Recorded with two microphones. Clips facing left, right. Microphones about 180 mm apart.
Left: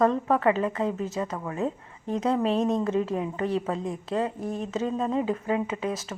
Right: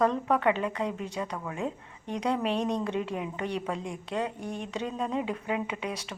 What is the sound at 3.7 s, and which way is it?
Speech, 30° left (ahead or behind).